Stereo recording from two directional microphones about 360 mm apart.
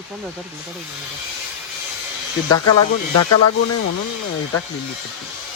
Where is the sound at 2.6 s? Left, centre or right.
Left.